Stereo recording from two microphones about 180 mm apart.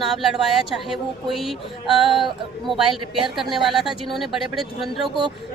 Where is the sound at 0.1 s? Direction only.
Centre (ahead or behind).